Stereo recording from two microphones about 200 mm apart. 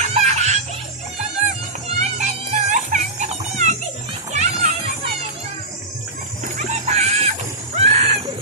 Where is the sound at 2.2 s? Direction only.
40° right (ahead or behind).